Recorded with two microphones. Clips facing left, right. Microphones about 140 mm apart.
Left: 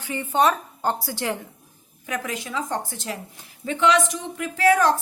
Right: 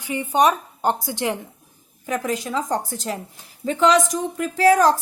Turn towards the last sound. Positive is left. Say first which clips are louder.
# right 3 dB
turn(degrees=-35)  # may be behind; listen again after turning